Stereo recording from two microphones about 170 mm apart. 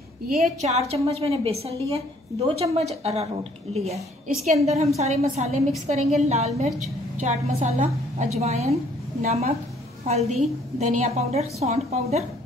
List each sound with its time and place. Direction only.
0.6 s a woman's voice: 40° right (ahead or behind)